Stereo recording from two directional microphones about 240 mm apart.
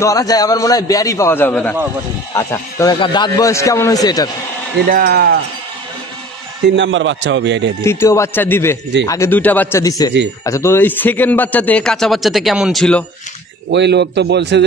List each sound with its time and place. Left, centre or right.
0.0 s a man's voice: centre
4.9 s speech: right
6.8 s a man's voice: right
7.8 s a man's voice: centre
13.7 s a man's voice: right